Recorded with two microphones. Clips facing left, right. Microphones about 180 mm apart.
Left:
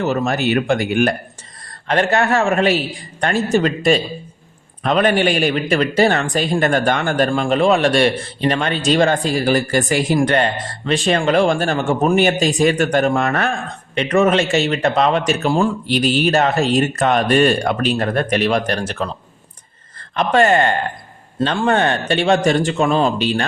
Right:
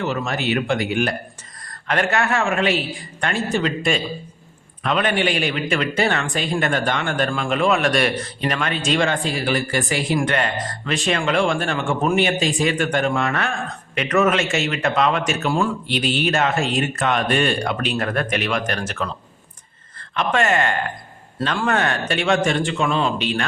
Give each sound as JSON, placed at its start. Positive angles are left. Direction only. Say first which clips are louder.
{"t": 0.0, "sound": "speech", "louder": "left 5 dB", "side_deg": 45}
{"t": 1.9, "sound": "speech", "louder": "left 4 dB", "side_deg": 35}
{"t": 13.9, "sound": "speech", "louder": "left 4 dB", "side_deg": 30}
{"t": 17.9, "sound": "speech", "louder": "left 4 dB", "side_deg": 30}
{"t": 20.1, "sound": "speech", "louder": "left 5 dB", "side_deg": 35}